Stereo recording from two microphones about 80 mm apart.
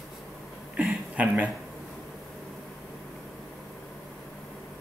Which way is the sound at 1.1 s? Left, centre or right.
Centre.